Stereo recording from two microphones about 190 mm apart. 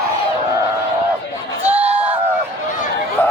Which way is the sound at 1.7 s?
10° right (ahead or behind).